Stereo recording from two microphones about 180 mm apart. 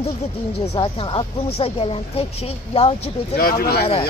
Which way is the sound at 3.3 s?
55° left (ahead or behind).